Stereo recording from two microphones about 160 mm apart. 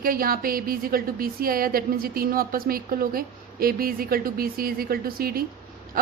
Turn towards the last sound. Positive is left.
turn(degrees=-70)  # may be behind; listen again after turning